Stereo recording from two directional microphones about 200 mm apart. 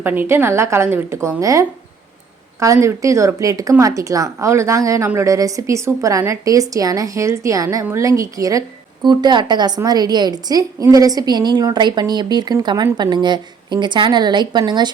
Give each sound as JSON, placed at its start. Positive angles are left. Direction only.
{"t": 0.0, "sound": "a woman's voice", "side_deg": -10}